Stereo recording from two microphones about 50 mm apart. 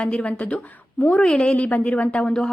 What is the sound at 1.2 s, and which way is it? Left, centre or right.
Speech, centre.